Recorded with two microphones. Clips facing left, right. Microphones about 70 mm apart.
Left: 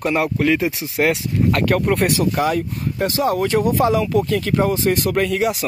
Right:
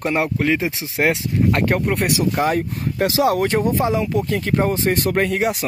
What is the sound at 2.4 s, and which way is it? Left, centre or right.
Speech, right.